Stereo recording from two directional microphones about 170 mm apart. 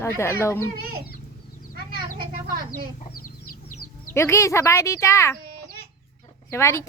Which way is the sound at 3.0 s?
55° left (ahead or behind).